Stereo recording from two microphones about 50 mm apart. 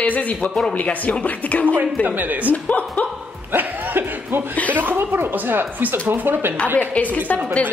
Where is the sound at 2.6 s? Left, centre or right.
Left.